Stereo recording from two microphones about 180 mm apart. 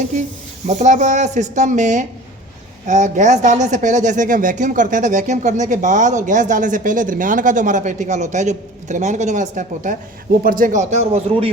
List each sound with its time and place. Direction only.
0.0 s speech: 40° right (ahead or behind)